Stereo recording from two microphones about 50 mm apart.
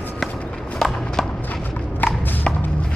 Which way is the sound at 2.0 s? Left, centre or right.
Left.